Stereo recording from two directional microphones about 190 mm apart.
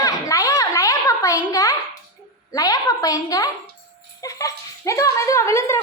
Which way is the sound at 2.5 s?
20° left (ahead or behind).